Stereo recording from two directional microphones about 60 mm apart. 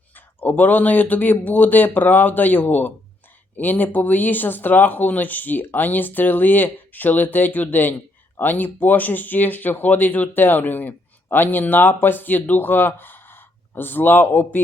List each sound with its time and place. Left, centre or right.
0.3 s speech: left